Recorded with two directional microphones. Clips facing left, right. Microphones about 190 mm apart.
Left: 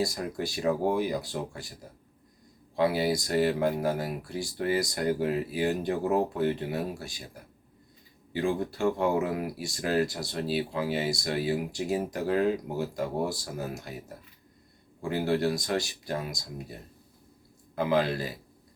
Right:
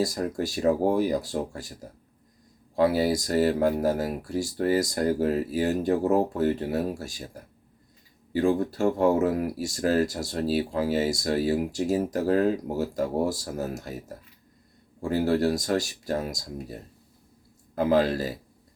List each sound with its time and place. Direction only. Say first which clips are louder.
0.0 s speech: right 4 dB; 40° right (ahead or behind)
2.7 s speech: right 3 dB; 40° right (ahead or behind)
8.3 s speech: right 5 dB; 40° right (ahead or behind)
15.0 s speech: right 4 dB; 40° right (ahead or behind)
17.7 s speech: right 4 dB; 40° right (ahead or behind)